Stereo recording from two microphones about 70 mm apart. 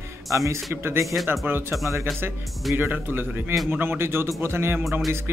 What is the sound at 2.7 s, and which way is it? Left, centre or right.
A man's voice, right.